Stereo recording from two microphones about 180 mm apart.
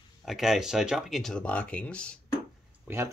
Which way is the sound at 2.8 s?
15° right (ahead or behind).